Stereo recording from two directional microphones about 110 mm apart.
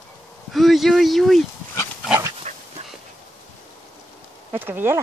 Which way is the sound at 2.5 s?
90° right.